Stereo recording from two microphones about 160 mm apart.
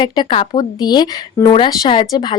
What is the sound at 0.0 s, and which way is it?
Speech, 30° left (ahead or behind).